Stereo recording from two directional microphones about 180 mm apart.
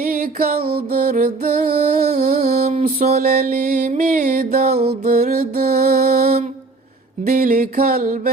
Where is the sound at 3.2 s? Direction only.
50° right (ahead or behind).